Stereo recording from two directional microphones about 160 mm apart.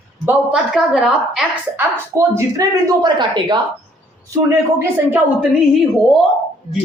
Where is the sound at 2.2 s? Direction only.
20° right (ahead or behind).